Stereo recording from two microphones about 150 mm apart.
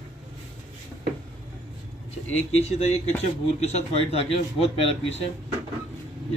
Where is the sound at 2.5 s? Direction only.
45° left (ahead or behind).